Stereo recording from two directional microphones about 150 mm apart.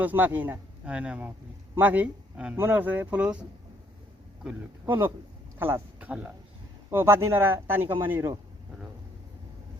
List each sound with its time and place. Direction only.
0.0 s speech: 10° right (ahead or behind)
4.4 s speech: 15° right (ahead or behind)